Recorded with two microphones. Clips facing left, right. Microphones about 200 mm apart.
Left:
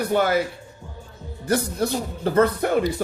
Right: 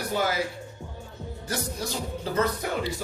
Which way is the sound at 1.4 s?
60° left (ahead or behind).